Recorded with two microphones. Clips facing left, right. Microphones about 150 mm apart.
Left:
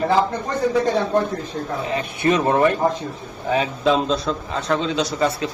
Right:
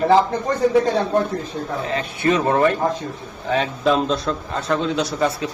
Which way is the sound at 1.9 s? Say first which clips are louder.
Even; 15° left (ahead or behind).